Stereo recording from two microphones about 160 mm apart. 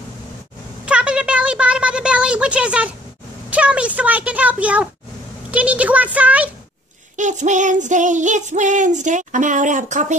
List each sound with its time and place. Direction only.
0.8 s a sound: 5° right (ahead or behind)
3.4 s a child's voice: 10° right (ahead or behind)
7.2 s child singing: 50° right (ahead or behind)